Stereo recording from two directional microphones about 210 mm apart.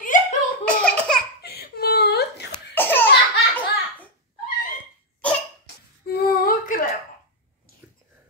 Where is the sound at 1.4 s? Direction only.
50° left (ahead or behind).